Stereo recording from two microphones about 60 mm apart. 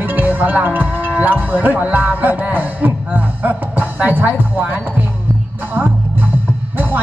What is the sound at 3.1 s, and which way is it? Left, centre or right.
Speech, right.